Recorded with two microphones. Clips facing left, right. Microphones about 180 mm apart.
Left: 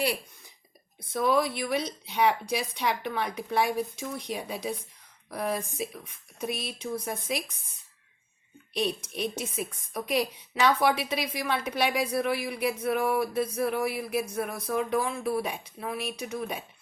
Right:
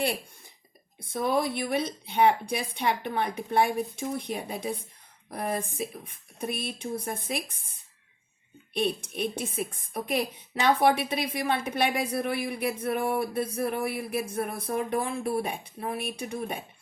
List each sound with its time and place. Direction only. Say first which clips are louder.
0.0 s a sound: even; 50° right (ahead or behind)
1.0 s speech: left 1 dB; 55° right (ahead or behind)
8.7 s speech: right 1 dB; 55° right (ahead or behind)